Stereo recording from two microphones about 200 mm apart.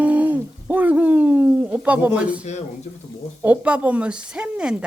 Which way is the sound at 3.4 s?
5° right (ahead or behind).